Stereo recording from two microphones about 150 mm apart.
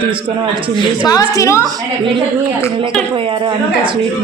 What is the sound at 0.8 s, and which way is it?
Speech, 25° left (ahead or behind).